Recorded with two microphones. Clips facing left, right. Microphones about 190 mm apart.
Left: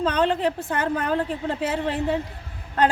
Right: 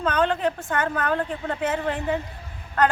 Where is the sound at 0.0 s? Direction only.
30° left (ahead or behind).